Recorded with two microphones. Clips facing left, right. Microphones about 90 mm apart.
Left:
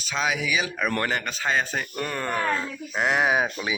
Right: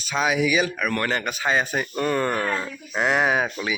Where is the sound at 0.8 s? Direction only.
30° left (ahead or behind).